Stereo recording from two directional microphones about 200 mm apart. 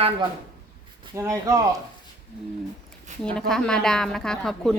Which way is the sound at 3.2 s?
5° left (ahead or behind).